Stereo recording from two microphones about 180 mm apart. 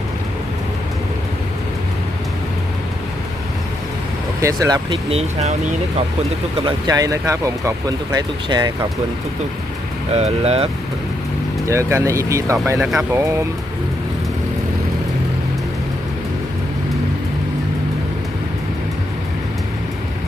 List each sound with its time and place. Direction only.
4.4 s speech: 20° right (ahead or behind)
5.0 s speech: 35° right (ahead or behind)
6.6 s speech: 25° right (ahead or behind)
10.1 s speech: 35° right (ahead or behind)
11.6 s speech: 15° right (ahead or behind)